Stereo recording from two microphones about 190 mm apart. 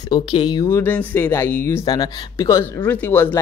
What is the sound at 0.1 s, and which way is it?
Speech, 25° left (ahead or behind).